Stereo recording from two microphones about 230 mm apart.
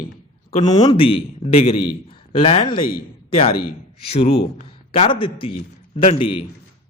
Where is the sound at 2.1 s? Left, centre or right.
Left.